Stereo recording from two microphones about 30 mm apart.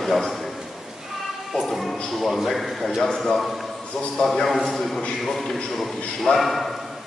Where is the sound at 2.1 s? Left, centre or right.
Centre.